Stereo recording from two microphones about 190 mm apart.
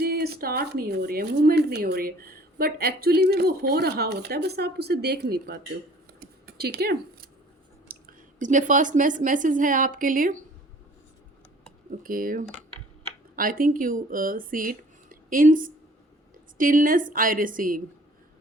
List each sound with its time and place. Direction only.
0.0 s speech: 55° right (ahead or behind)
6.4 s a sound: 55° right (ahead or behind)
7.9 s a woman's voice: 45° right (ahead or behind)
12.0 s a woman's voice: 50° right (ahead or behind)